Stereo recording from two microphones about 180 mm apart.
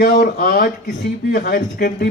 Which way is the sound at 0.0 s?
60° left (ahead or behind).